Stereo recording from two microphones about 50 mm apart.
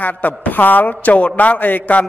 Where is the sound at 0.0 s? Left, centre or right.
Left.